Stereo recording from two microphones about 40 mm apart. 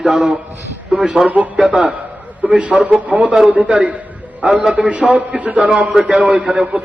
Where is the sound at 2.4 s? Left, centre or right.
Right.